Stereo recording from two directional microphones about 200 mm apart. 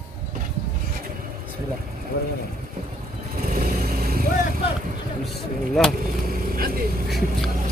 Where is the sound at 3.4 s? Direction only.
50° right (ahead or behind).